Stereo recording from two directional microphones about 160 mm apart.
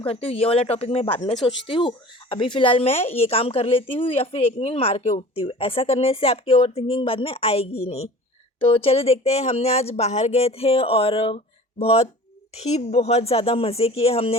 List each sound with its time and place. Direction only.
0.0 s a woman's voice: 35° left (ahead or behind)